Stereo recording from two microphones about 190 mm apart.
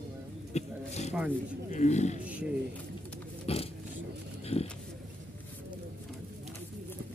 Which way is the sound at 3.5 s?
30° left (ahead or behind).